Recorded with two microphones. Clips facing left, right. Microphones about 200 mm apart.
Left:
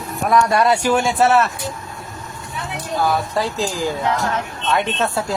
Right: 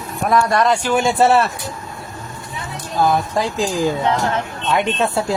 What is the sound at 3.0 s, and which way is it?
Speech, 15° right (ahead or behind).